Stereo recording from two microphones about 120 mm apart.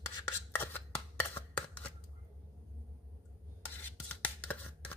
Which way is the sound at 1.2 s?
15° left (ahead or behind).